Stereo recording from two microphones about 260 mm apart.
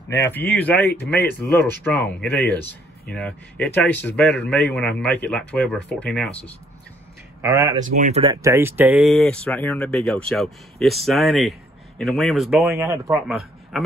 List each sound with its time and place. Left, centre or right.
0.1 s a man's voice: centre
7.4 s speech: centre
7.8 s speech: right
8.4 s a man's voice: centre
12.7 s a man's voice: centre